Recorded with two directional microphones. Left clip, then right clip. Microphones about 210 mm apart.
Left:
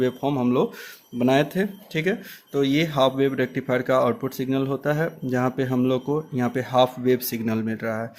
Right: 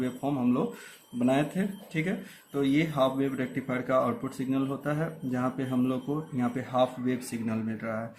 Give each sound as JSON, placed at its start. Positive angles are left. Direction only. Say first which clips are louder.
{"t": 0.0, "sound": "speech", "louder": "left 7 dB", "side_deg": 40}